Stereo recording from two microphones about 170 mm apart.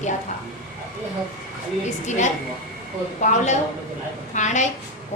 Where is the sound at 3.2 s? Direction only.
45° left (ahead or behind).